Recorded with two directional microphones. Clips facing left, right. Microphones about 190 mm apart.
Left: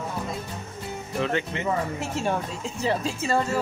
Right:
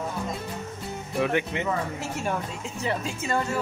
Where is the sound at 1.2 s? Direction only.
15° right (ahead or behind).